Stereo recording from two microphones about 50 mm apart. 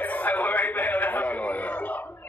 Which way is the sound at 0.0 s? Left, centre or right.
Left.